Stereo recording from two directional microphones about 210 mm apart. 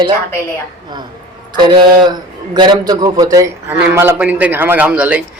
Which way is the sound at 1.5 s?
20° right (ahead or behind).